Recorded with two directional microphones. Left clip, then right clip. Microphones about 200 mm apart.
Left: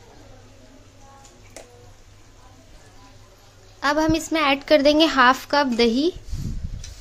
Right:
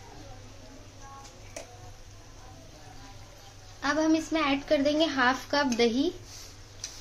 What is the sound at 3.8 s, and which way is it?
A woman's voice, 45° left (ahead or behind).